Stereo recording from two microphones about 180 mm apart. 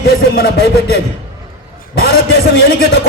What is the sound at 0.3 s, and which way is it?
Speech, 60° left (ahead or behind).